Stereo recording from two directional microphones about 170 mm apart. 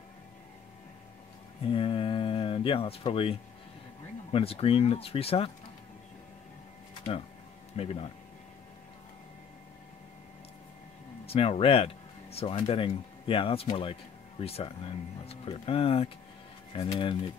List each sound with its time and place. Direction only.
1.7 s a sound: 30° left (ahead or behind)
4.3 s speech: 35° left (ahead or behind)
7.7 s speech: 35° left (ahead or behind)
11.2 s speech: 35° left (ahead or behind)